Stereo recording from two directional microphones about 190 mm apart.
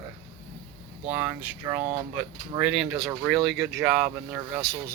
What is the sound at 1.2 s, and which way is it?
Speech, 10° right (ahead or behind).